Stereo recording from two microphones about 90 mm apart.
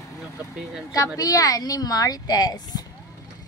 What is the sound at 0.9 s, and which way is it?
A woman's voice, 40° left (ahead or behind).